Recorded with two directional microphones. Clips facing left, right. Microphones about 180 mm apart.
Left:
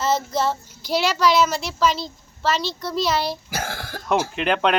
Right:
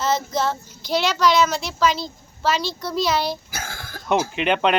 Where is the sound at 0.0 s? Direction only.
5° left (ahead or behind).